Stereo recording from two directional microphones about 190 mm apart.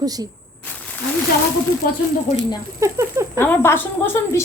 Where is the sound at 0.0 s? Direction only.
20° right (ahead or behind).